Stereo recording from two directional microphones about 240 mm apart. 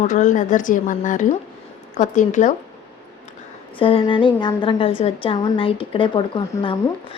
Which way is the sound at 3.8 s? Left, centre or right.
Left.